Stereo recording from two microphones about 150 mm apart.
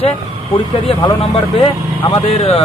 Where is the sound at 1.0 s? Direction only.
30° left (ahead or behind).